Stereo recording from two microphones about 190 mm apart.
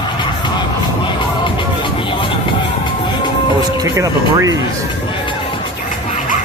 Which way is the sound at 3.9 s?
15° right (ahead or behind).